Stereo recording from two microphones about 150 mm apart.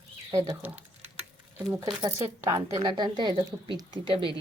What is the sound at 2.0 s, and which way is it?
A woman's voice, 20° right (ahead or behind).